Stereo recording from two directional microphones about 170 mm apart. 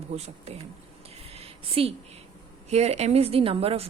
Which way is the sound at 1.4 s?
35° right (ahead or behind).